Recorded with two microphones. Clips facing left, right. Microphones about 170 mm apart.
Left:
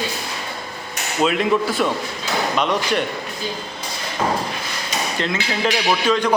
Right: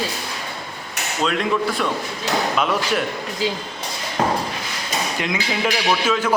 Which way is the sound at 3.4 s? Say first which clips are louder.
Right 6 dB; 90° right.